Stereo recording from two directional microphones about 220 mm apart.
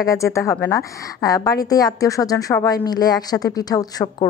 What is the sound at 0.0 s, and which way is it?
A woman's voice, 15° left (ahead or behind).